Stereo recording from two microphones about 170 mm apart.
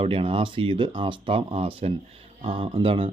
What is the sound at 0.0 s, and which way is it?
Speech, 30° right (ahead or behind).